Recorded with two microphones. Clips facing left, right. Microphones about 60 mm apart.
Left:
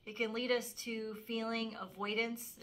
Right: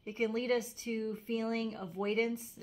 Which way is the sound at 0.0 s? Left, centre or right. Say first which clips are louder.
Right 4 dB; centre.